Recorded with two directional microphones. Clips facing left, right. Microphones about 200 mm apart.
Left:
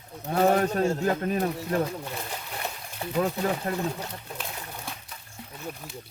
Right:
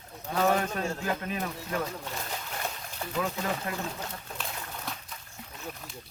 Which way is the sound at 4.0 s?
10° left (ahead or behind).